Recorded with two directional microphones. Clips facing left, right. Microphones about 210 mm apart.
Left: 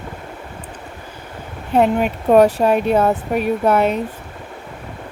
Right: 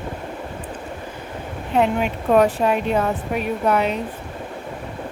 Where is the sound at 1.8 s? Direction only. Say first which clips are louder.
Left 4 dB; 45° left (ahead or behind).